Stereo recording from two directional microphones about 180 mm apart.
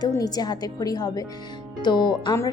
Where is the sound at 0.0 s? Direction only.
20° left (ahead or behind).